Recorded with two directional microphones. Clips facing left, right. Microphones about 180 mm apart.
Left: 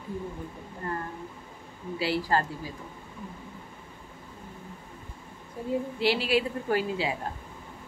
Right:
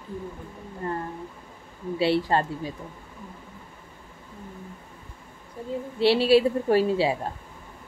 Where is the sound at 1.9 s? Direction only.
25° right (ahead or behind).